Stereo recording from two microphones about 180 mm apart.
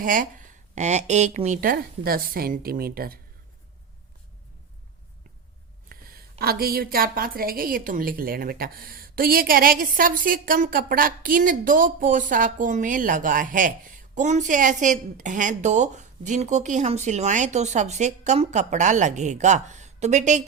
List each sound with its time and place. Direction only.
0.0 s a woman's voice: 50° right (ahead or behind)
5.9 s a sound: 55° right (ahead or behind)
6.4 s a woman's voice: 60° right (ahead or behind); by 20.4 s 40° right (ahead or behind)